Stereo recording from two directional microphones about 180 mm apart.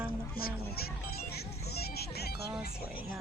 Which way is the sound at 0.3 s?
55° left (ahead or behind).